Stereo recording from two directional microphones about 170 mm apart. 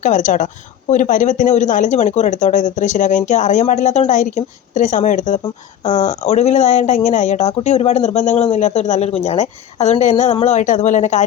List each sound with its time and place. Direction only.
0.0 s speech: 45° left (ahead or behind)